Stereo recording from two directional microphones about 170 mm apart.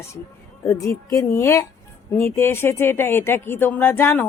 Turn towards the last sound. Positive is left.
turn(degrees=15)  # may be behind; listen again after turning